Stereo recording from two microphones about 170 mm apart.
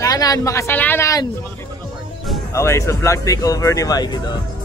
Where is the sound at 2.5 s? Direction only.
15° left (ahead or behind).